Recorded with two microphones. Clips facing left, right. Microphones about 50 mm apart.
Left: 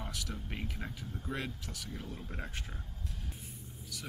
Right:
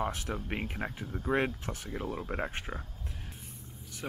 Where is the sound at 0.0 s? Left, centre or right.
Right.